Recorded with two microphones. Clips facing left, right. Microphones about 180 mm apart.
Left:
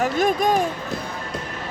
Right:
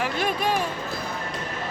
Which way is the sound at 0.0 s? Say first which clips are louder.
Left 6 dB; 45° left (ahead or behind).